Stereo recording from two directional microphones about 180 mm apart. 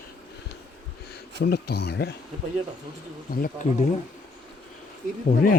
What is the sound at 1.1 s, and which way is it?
Speech, 65° left (ahead or behind).